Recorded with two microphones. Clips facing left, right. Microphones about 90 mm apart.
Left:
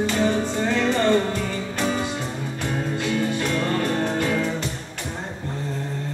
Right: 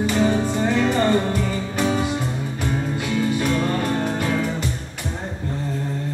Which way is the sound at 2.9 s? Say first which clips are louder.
Right 1 dB; 15° right (ahead or behind).